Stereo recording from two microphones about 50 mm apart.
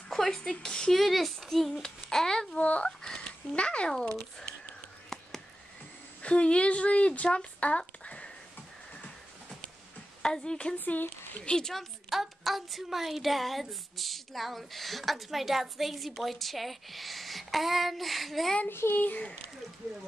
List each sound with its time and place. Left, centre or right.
0.1 s speech: centre
1.0 s speech: centre
1.7 s babbling: centre
2.6 s speech: left
3.2 s a sound: left
6.2 s speech: left
10.2 s a woman's voice: centre
11.7 s speech: centre
18.7 s a child's voice: left